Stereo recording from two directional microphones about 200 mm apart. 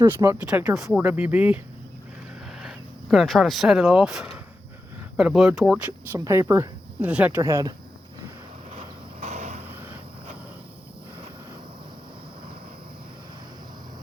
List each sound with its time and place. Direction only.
0.0 s speech: 15° right (ahead or behind)
2.6 s speech: centre (ahead or behind)
9.2 s vehicle: 35° right (ahead or behind)